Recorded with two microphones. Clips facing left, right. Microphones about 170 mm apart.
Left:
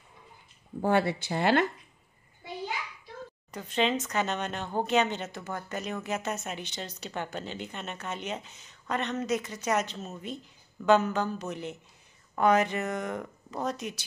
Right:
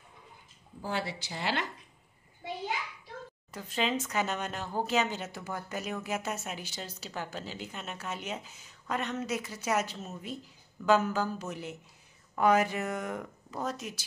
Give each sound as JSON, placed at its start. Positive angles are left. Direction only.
{"t": 0.7, "sound": "speech", "side_deg": 60}
{"t": 3.5, "sound": "speech", "side_deg": -5}